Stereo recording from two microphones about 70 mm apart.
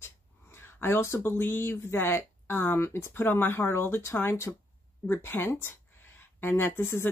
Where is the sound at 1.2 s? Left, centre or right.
Left.